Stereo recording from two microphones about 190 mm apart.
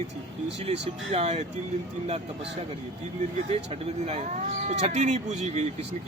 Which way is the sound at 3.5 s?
30° right (ahead or behind).